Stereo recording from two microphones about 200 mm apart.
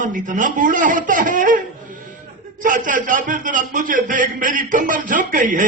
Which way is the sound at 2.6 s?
40° right (ahead or behind).